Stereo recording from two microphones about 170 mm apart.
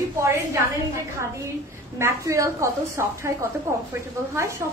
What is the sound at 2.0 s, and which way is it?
A woman's voice, 15° right (ahead or behind).